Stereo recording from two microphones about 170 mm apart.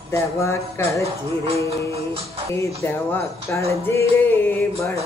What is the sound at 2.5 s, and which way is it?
Speech, 15° left (ahead or behind).